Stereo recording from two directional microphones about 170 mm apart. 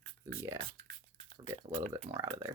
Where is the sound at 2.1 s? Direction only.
20° right (ahead or behind).